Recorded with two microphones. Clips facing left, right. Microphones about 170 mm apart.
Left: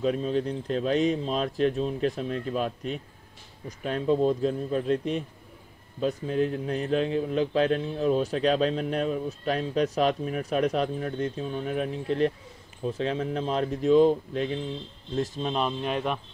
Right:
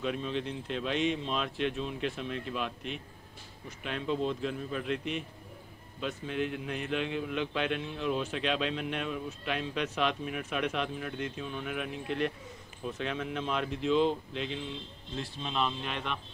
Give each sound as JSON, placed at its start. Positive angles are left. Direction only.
{"t": 0.0, "sound": "speech", "side_deg": 40}